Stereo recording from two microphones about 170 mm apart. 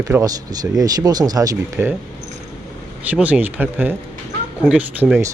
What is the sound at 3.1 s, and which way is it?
Speech, 10° right (ahead or behind).